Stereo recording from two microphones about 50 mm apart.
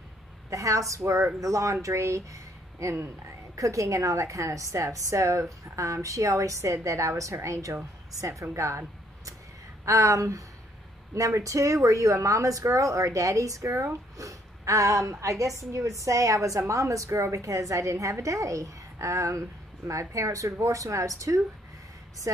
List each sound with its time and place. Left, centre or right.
0.5 s a woman's voice: right